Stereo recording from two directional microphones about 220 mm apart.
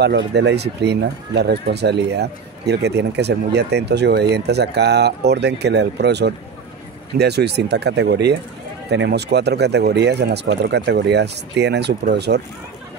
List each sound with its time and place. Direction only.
0.0 s speech: 50° right (ahead or behind)